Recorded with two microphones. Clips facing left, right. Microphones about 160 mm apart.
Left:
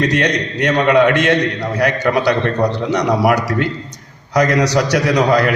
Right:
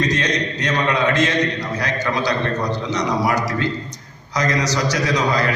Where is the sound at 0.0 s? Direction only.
65° left (ahead or behind).